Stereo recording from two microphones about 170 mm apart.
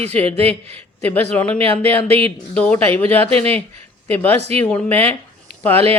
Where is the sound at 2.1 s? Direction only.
35° right (ahead or behind).